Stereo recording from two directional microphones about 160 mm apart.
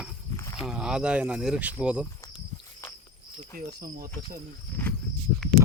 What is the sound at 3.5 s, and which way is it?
Speech, 60° right (ahead or behind).